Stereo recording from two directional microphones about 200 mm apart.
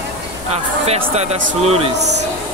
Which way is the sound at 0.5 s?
30° right (ahead or behind).